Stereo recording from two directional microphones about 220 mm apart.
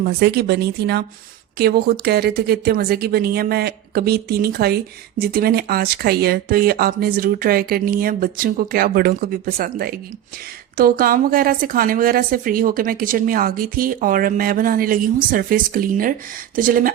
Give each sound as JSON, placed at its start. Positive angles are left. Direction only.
{"t": 0.0, "sound": "a woman's voice", "side_deg": -45}